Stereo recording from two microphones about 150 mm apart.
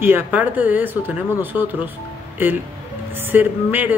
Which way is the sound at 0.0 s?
10° right (ahead or behind).